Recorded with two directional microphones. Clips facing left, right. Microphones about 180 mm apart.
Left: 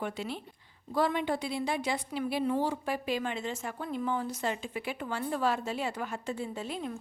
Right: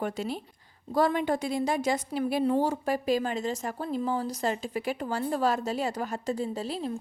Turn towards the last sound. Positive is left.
turn(degrees=-35)  # may be behind; listen again after turning